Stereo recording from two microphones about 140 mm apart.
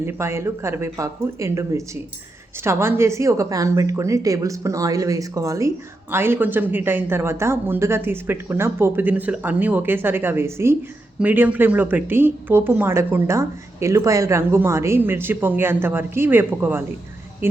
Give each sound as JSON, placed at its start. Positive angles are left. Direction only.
{"t": 0.0, "sound": "speech", "side_deg": -15}